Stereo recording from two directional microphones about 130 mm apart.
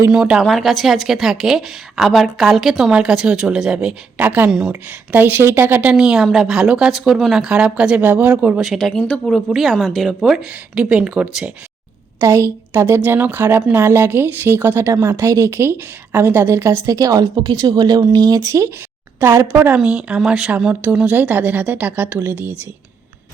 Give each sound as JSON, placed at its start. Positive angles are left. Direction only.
{"t": 0.1, "sound": "a woman's voice", "side_deg": -5}
{"t": 8.6, "sound": "a woman's voice", "side_deg": 0}
{"t": 12.2, "sound": "a woman's voice", "side_deg": -20}